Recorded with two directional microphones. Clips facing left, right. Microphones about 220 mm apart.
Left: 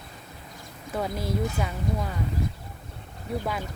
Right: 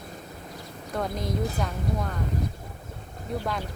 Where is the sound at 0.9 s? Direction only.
5° left (ahead or behind).